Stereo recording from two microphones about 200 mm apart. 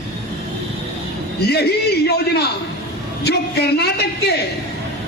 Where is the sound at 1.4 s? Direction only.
55° left (ahead or behind).